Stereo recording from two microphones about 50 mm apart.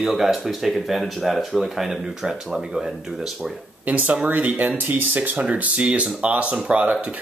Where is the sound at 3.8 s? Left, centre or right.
Right.